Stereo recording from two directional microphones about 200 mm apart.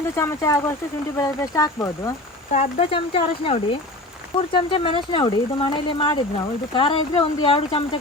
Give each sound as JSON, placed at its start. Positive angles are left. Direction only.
{"t": 0.2, "sound": "speech", "side_deg": 15}
{"t": 2.5, "sound": "speech", "side_deg": 30}